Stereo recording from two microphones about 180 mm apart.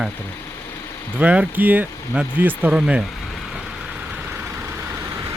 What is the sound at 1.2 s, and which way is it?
Speech, 5° right (ahead or behind).